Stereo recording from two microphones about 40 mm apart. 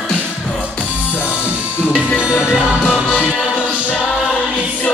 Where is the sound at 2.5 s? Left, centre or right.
Right.